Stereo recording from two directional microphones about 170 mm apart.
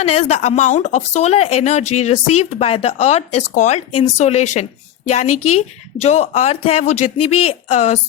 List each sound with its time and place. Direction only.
0.0 s speech: 40° left (ahead or behind)